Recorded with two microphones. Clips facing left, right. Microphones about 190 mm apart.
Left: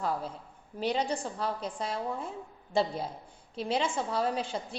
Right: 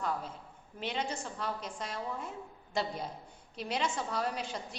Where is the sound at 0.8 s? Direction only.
35° left (ahead or behind).